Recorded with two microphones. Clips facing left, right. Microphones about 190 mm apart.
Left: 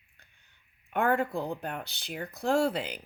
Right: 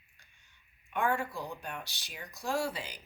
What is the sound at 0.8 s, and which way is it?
Speech, 60° left (ahead or behind).